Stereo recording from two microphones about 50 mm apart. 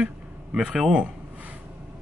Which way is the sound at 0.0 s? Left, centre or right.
Right.